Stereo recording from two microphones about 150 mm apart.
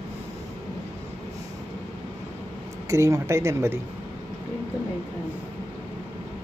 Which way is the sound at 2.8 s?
20° right (ahead or behind).